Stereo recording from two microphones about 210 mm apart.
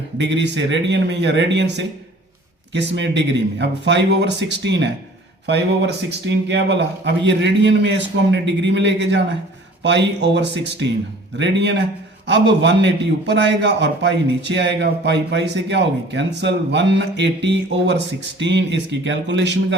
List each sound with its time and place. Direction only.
0.2 s a man's voice: 55° right (ahead or behind)